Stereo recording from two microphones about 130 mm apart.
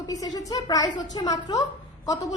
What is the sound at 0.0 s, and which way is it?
A woman's voice, 30° left (ahead or behind).